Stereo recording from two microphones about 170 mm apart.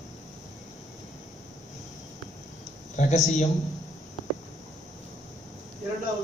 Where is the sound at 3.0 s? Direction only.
45° left (ahead or behind).